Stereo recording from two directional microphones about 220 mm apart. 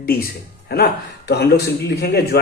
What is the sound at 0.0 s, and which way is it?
Speech, 40° left (ahead or behind).